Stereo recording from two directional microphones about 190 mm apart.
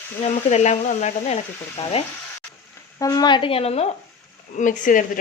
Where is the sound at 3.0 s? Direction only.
20° left (ahead or behind).